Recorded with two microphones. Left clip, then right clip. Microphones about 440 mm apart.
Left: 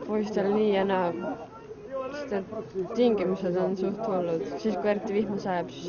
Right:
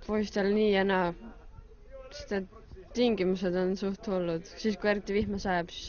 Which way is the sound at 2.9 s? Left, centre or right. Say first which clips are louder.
Left 3 dB; right.